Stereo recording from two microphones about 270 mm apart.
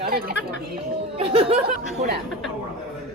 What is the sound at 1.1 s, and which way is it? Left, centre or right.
Speech, right.